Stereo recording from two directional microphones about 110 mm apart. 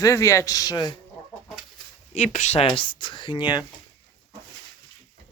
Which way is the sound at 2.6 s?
50° left (ahead or behind).